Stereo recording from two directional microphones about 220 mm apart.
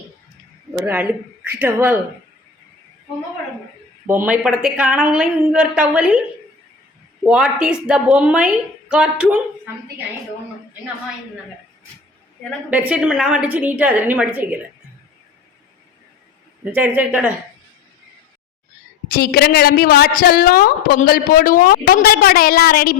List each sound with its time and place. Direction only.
0.7 s a woman's voice: 10° right (ahead or behind)
4.0 s a woman's voice: 10° right (ahead or behind)
7.3 s a woman's voice: 5° right (ahead or behind)
12.7 s a woman's voice: 5° right (ahead or behind)
16.7 s a woman's voice: 10° right (ahead or behind)
19.1 s a woman's voice: 45° left (ahead or behind)